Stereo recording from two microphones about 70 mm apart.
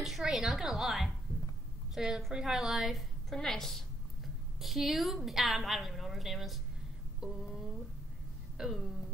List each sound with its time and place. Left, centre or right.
0.0 s a woman's voice: centre
7.2 s a sound: centre
8.5 s music: centre